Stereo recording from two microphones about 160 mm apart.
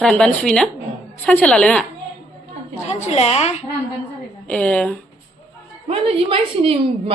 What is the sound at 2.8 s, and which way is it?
Speech, 45° left (ahead or behind).